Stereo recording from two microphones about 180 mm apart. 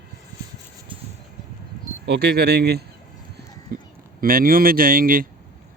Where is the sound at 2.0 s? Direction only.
65° right (ahead or behind).